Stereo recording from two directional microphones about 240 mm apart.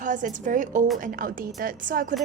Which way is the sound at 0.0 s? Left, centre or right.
Right.